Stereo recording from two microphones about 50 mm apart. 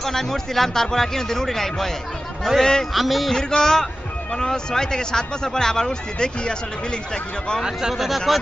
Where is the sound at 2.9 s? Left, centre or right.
Centre.